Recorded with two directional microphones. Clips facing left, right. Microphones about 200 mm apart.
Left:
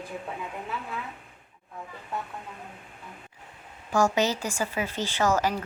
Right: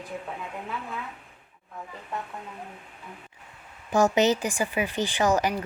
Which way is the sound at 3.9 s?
20° right (ahead or behind).